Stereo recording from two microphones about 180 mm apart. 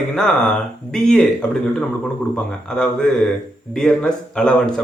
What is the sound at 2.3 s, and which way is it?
Speech, 5° left (ahead or behind).